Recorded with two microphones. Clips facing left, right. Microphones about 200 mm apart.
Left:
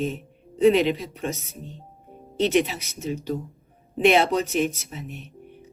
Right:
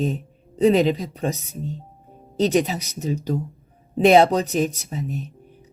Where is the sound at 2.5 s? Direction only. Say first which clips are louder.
Right 1 dB; 35° right (ahead or behind).